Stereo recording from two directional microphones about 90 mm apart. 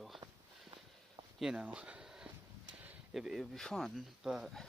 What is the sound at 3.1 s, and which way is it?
Speech, 5° right (ahead or behind).